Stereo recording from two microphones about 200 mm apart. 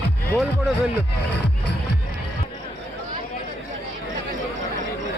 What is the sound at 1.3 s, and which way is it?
Music, 60° left (ahead or behind).